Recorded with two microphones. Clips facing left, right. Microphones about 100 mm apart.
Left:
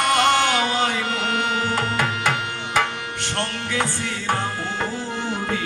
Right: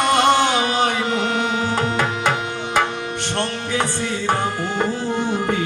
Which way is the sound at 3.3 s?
25° right (ahead or behind).